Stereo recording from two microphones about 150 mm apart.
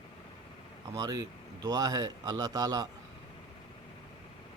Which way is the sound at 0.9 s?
25° right (ahead or behind).